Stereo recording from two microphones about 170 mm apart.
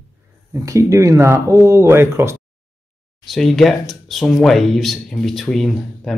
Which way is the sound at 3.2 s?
Centre (ahead or behind).